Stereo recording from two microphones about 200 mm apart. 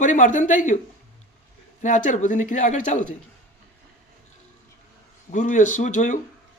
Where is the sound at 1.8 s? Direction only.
35° left (ahead or behind).